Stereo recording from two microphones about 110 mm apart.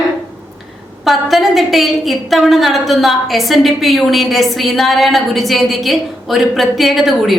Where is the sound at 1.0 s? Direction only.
Centre (ahead or behind).